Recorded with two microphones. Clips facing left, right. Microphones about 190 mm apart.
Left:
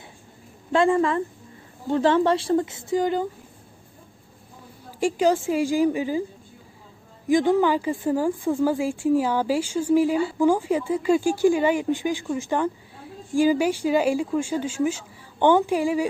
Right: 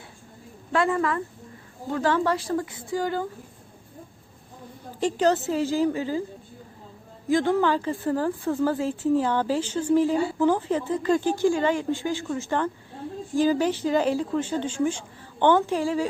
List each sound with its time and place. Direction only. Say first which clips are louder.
0.7 s a woman's voice: left 4 dB; 25° left (ahead or behind)
4.9 s a woman's voice: left 1 dB; 10° left (ahead or behind)
7.3 s a woman's voice: left 3 dB; 15° left (ahead or behind)